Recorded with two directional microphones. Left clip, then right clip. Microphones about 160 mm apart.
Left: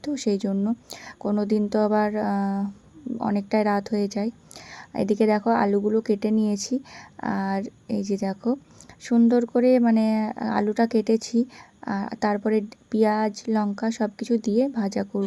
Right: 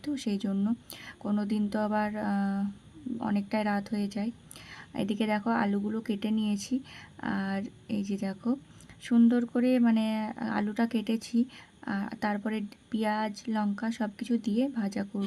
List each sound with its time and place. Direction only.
0.0 s speech: 20° left (ahead or behind)